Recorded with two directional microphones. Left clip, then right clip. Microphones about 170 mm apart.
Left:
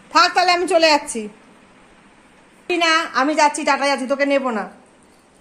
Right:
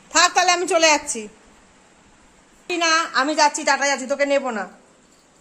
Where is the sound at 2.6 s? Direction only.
15° left (ahead or behind).